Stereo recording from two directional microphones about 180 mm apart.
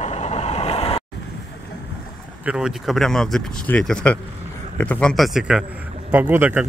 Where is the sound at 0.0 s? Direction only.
40° left (ahead or behind).